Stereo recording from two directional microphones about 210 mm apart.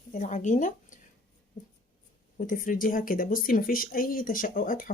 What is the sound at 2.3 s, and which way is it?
Speech, 40° left (ahead or behind).